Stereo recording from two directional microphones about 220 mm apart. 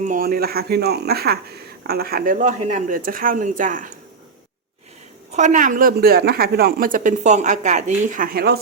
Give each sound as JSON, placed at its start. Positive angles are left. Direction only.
{"t": 0.0, "sound": "speech", "side_deg": -40}
{"t": 5.3, "sound": "speech", "side_deg": -35}